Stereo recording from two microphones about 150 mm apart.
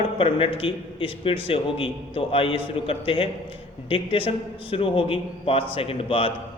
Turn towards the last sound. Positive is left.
turn(degrees=35)  # may be behind; listen again after turning